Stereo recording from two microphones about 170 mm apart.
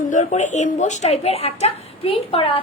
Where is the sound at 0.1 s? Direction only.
45° left (ahead or behind).